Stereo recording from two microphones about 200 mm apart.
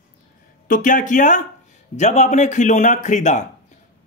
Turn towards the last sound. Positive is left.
turn(degrees=35)  # may be behind; listen again after turning